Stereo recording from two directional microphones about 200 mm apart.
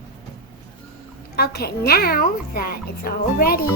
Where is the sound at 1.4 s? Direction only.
55° left (ahead or behind).